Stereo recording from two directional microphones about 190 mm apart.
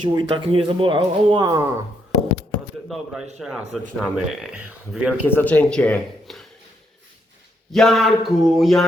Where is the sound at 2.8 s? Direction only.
Centre (ahead or behind).